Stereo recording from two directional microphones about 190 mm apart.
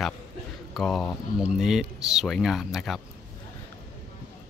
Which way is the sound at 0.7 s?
Centre (ahead or behind).